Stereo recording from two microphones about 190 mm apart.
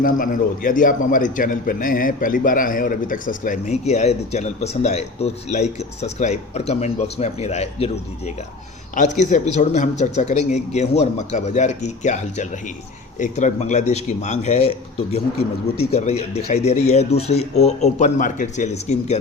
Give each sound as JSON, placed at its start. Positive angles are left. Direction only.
{"t": 0.0, "sound": "a man's voice", "side_deg": 45}